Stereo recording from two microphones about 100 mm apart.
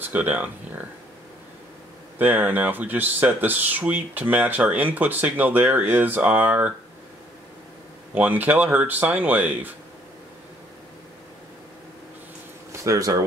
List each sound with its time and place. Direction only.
0.0 s speech: 15° right (ahead or behind)
2.1 s speech: 20° right (ahead or behind)
8.1 s speech: 15° right (ahead or behind)
12.8 s speech: 35° right (ahead or behind)